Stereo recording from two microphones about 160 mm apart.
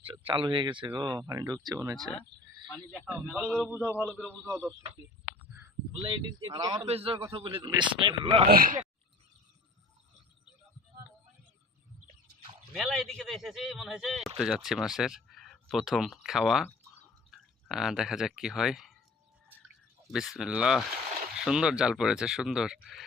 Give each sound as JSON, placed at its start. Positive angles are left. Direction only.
{"t": 0.0, "sound": "speech", "side_deg": -35}
{"t": 2.6, "sound": "speech", "side_deg": 10}
{"t": 3.1, "sound": "a man's voice", "side_deg": -10}
{"t": 3.3, "sound": "a man's voice", "side_deg": 0}
{"t": 3.7, "sound": "a man's voice", "side_deg": -10}
{"t": 5.5, "sound": "a sound", "side_deg": -20}
{"t": 5.9, "sound": "speech", "side_deg": -35}
{"t": 6.8, "sound": "speech", "side_deg": -35}
{"t": 8.4, "sound": "speech", "side_deg": -65}
{"t": 12.7, "sound": "a man's voice", "side_deg": 0}
{"t": 17.7, "sound": "a man's voice", "side_deg": 0}
{"t": 20.1, "sound": "a man's voice", "side_deg": 0}